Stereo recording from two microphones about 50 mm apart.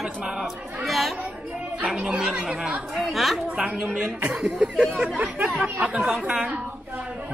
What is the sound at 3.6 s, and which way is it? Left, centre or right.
Speech, right.